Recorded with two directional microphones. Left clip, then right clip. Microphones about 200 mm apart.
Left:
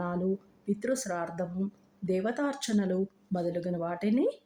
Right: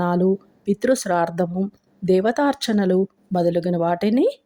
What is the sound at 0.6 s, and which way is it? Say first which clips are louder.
Speech: right 12 dB; 35° right (ahead or behind).